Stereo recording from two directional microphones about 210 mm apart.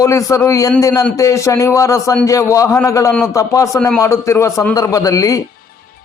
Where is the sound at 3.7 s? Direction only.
5° left (ahead or behind).